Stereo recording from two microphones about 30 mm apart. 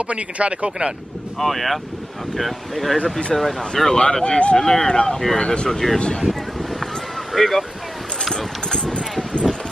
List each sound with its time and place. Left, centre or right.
0.1 s speech: right
0.7 s speech: right
1.4 s speech: centre
3.0 s speech: left
3.3 s speech: centre
4.0 s speech: left
4.6 s speech: centre
4.8 s speech: left
5.7 s speech: centre
7.3 s speech: centre
8.3 s a sound: left